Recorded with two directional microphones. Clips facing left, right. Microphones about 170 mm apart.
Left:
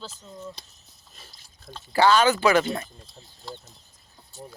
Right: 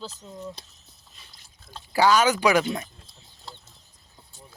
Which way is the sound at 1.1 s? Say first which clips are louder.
Left 6 dB; 40° left (ahead or behind).